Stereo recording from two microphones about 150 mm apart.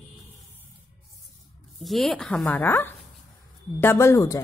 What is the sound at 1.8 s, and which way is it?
A woman's voice, centre (ahead or behind).